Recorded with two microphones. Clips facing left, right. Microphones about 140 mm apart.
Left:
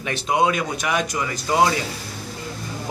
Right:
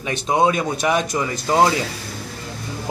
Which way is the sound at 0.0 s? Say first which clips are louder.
Right 2 dB; 20° right (ahead or behind).